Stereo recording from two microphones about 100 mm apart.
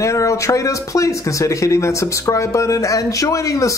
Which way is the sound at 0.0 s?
30° left (ahead or behind).